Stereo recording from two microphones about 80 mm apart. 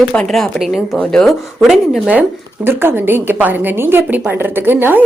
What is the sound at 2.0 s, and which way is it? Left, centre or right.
Speech, centre.